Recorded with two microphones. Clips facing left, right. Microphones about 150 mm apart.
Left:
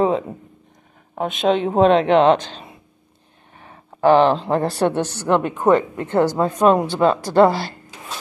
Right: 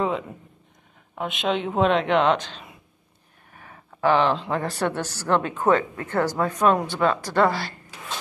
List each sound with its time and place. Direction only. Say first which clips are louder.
1.1 s speech: left 7 dB; 40° left (ahead or behind)